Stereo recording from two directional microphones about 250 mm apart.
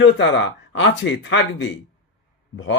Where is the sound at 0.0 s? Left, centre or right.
Left.